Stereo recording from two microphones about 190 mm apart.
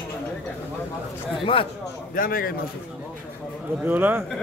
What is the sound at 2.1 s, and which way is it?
Speech, 50° left (ahead or behind).